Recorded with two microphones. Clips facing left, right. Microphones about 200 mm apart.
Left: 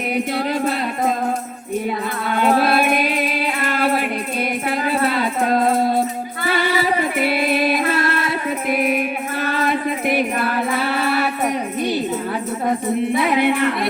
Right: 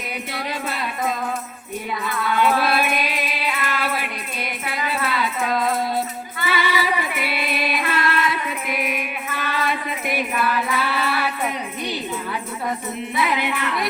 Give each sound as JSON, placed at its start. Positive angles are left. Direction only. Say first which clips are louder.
{"t": 0.3, "sound": "music", "louder": "left 7 dB", "side_deg": 45}
{"t": 2.2, "sound": "music", "louder": "left 3 dB", "side_deg": 50}
{"t": 5.0, "sound": "rattle", "louder": "left 3 dB", "side_deg": 50}
{"t": 6.4, "sound": "music", "louder": "left 3 dB", "side_deg": 50}
{"t": 7.9, "sound": "music", "louder": "left 2 dB", "side_deg": 30}
{"t": 8.7, "sound": "music", "louder": "left 9 dB", "side_deg": 50}
{"t": 13.1, "sound": "music", "louder": "left 4 dB", "side_deg": 55}